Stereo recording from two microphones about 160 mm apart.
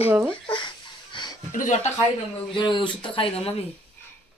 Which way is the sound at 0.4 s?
30° left (ahead or behind).